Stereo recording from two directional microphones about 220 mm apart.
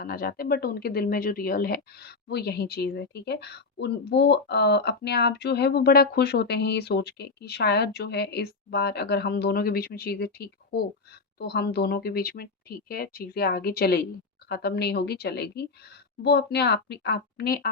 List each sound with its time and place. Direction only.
0.0 s speech: 40° left (ahead or behind)